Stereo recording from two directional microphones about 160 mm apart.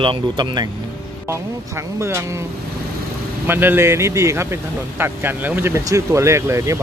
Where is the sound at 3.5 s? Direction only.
10° right (ahead or behind).